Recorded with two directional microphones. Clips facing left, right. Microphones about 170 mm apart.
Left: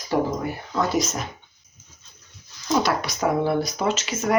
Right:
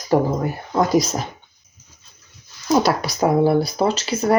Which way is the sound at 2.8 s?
35° right (ahead or behind).